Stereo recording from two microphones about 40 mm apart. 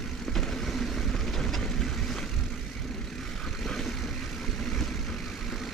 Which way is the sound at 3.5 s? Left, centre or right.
Centre.